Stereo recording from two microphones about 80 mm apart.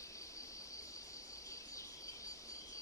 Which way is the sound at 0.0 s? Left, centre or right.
Left.